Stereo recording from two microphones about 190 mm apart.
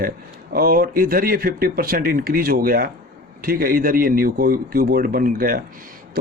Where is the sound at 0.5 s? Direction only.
50° right (ahead or behind).